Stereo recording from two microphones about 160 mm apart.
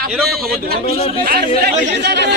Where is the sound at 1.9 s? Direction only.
90° right.